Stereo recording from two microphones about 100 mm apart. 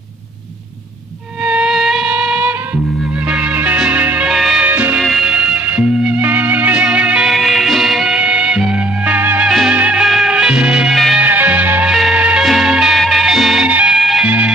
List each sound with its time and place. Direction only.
1.4 s music: 5° right (ahead or behind)
4.3 s music: 5° right (ahead or behind)
4.6 s music: 15° right (ahead or behind)
4.9 s music: 5° right (ahead or behind)
9.5 s music: 5° right (ahead or behind)
11.1 s music: 15° right (ahead or behind)
11.9 s music: 5° right (ahead or behind)
13.7 s music: 15° right (ahead or behind)
13.9 s music: centre (ahead or behind)
14.2 s music: 15° right (ahead or behind)